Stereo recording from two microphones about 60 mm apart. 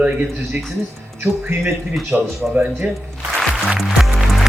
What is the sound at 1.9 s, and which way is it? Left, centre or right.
Speech, centre.